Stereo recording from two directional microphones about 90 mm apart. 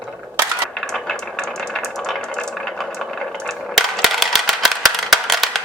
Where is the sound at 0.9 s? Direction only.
5° left (ahead or behind).